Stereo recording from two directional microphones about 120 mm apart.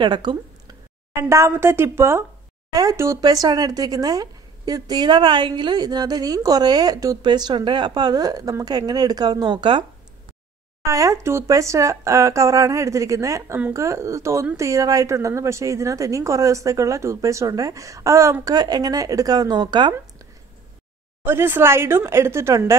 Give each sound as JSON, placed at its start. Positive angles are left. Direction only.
{"t": 0.0, "sound": "speech", "side_deg": -40}
{"t": 1.3, "sound": "speech", "side_deg": -20}
{"t": 10.9, "sound": "speech", "side_deg": -25}
{"t": 21.2, "sound": "speech", "side_deg": -20}